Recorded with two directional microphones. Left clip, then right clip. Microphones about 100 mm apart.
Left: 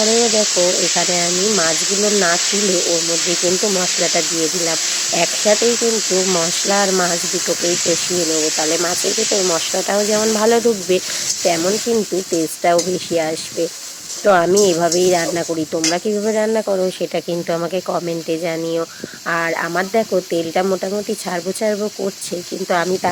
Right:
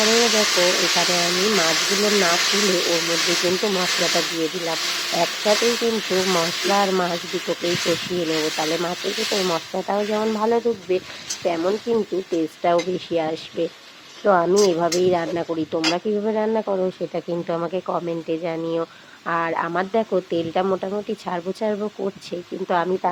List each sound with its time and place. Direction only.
0.0 s speech: 30° left (ahead or behind)
14.3 s speech: 40° left (ahead or behind)